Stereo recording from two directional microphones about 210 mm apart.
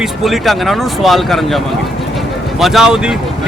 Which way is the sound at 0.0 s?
Centre (ahead or behind).